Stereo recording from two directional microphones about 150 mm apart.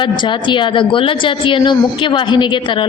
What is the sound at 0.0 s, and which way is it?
A woman's voice, 30° left (ahead or behind).